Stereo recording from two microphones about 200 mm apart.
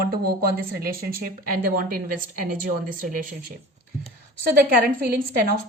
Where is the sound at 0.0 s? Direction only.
50° right (ahead or behind).